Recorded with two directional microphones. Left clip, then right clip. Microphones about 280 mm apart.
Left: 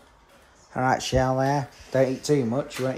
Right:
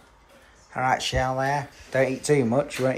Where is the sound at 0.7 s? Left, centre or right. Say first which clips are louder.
Left 1 dB; centre.